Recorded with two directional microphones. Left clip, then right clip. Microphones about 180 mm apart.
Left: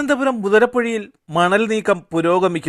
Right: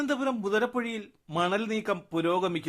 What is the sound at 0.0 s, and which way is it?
Speech, 35° left (ahead or behind).